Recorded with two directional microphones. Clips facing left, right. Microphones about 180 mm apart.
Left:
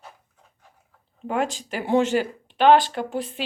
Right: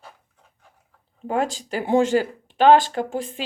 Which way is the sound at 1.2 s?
35° right (ahead or behind).